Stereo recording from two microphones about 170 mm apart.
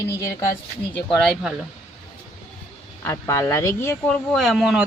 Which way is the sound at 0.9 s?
5° left (ahead or behind).